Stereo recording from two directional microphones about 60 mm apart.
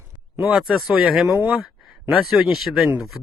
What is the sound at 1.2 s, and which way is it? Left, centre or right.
Speech, right.